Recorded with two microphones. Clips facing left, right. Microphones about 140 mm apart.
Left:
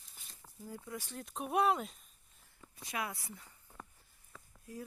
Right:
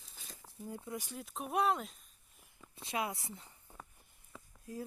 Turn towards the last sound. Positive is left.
turn(degrees=-25)  # may be behind; listen again after turning